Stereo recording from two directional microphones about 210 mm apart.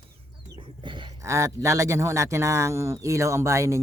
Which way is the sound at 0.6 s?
25° right (ahead or behind).